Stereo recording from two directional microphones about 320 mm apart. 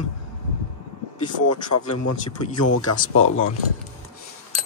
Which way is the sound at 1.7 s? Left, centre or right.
Left.